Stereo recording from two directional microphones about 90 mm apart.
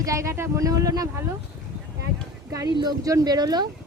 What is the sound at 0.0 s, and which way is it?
Speech, 35° right (ahead or behind).